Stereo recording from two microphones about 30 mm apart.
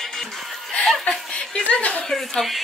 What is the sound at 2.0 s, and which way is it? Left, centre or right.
Speech, centre.